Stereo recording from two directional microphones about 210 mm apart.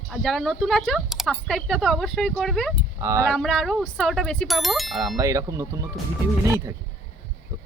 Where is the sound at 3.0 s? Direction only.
15° right (ahead or behind).